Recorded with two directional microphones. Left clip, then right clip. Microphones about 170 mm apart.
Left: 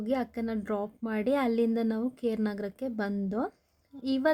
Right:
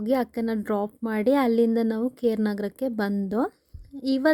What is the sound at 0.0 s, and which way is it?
A woman's voice, 40° right (ahead or behind).